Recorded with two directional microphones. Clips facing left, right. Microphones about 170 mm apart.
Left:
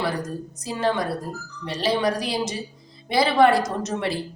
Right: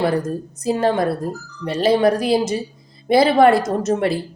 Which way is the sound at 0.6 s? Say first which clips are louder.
Right 6 dB; 50° right (ahead or behind).